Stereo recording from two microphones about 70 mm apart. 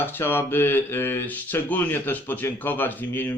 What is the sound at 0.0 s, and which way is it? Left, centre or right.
A man's voice, left.